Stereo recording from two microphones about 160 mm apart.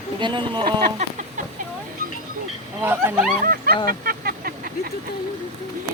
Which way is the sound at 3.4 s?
65° right (ahead or behind).